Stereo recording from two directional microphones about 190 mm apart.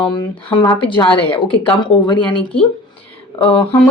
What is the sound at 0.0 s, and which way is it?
Speech, 25° left (ahead or behind).